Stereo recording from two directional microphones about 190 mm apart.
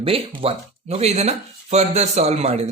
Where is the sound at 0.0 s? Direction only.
30° right (ahead or behind).